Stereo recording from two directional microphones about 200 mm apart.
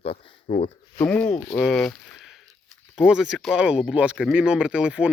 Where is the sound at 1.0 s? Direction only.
5° left (ahead or behind).